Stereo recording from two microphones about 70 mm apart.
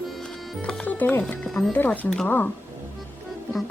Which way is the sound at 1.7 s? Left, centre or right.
Left.